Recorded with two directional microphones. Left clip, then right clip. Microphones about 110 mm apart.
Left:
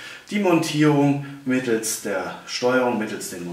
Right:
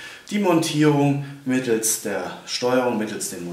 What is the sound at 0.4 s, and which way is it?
Speech, 15° right (ahead or behind).